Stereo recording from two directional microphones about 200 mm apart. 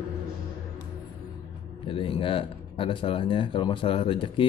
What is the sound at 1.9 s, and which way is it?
Speech, 25° left (ahead or behind).